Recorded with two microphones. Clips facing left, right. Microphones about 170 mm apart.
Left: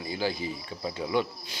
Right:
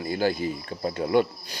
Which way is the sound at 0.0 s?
55° right (ahead or behind).